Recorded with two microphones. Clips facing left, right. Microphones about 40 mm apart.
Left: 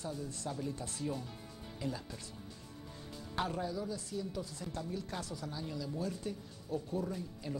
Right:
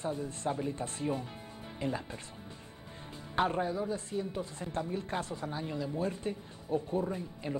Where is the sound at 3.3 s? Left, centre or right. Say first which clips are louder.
Right 6 dB; right.